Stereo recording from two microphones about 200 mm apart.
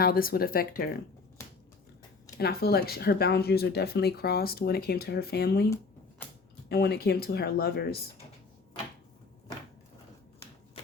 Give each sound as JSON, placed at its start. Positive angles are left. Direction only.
{"t": 0.0, "sound": "speech", "side_deg": 45}
{"t": 2.4, "sound": "speech", "side_deg": 50}
{"t": 6.7, "sound": "speech", "side_deg": 55}